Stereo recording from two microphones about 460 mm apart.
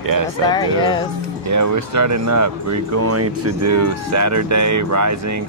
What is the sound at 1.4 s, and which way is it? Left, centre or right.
Speech, right.